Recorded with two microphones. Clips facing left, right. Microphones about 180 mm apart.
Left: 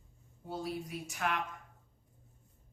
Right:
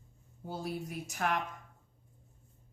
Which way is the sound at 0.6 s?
45° right (ahead or behind).